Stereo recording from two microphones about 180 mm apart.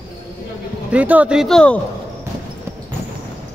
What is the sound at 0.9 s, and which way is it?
Speech, 10° right (ahead or behind).